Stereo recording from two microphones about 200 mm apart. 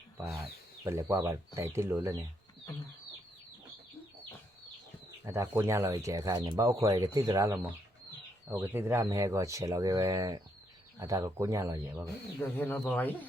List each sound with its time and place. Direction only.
0.9 s speech: 15° right (ahead or behind)
5.2 s speech: 15° right (ahead or behind)
12.4 s speech: 10° left (ahead or behind)